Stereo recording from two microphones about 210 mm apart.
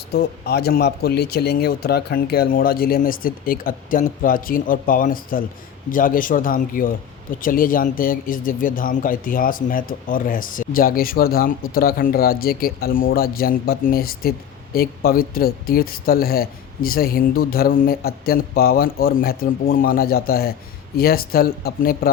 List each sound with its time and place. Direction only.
0.1 s a man's voice: 50° left (ahead or behind)